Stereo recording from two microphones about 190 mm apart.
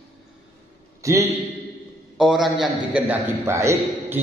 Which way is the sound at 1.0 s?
15° right (ahead or behind).